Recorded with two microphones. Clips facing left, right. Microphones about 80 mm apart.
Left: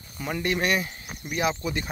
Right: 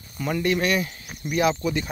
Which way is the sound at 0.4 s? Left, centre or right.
Left.